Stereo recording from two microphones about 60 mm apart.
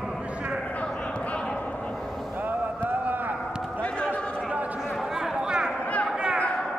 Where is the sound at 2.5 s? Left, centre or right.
Right.